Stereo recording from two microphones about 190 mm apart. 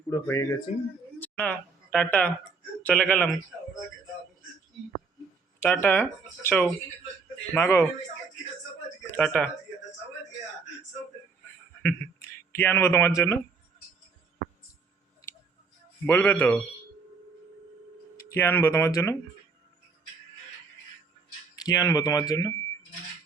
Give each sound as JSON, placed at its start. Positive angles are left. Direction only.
{"t": 0.1, "sound": "a man's voice", "side_deg": 15}
{"t": 0.7, "sound": "speech", "side_deg": 35}
{"t": 1.2, "sound": "a man's voice", "side_deg": 5}
{"t": 5.6, "sound": "a man's voice", "side_deg": 10}
{"t": 9.1, "sound": "speech", "side_deg": 5}
{"t": 12.5, "sound": "a man's voice", "side_deg": 10}
{"t": 16.0, "sound": "a man's voice", "side_deg": 10}
{"t": 18.3, "sound": "a man's voice", "side_deg": 10}
{"t": 21.6, "sound": "speech", "side_deg": 20}